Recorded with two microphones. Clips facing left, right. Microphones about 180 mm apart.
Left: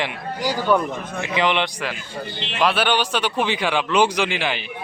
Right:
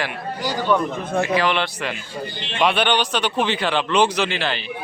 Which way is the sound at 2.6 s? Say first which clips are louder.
Right 1 dB; 5° left (ahead or behind).